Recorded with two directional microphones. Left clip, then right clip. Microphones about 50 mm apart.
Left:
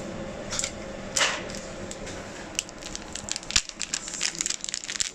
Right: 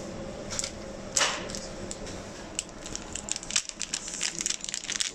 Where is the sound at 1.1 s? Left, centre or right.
Right.